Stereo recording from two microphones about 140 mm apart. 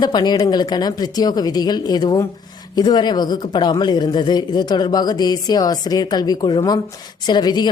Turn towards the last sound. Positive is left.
turn(degrees=30)  # may be behind; listen again after turning